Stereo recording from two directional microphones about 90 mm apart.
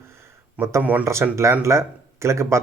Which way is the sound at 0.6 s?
30° right (ahead or behind).